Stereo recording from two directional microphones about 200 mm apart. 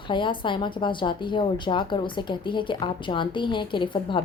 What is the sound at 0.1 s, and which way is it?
A woman's voice, 25° left (ahead or behind).